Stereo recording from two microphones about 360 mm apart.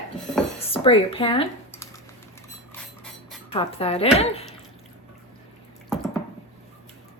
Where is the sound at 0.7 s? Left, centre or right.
Centre.